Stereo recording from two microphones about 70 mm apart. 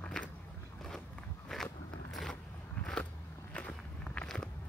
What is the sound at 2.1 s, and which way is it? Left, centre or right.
Vehicle, centre.